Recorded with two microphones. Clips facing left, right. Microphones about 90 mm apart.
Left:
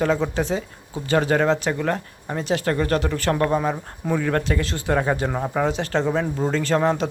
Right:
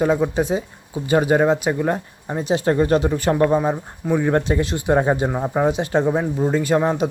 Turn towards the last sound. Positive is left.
turn(degrees=-15)  # may be behind; listen again after turning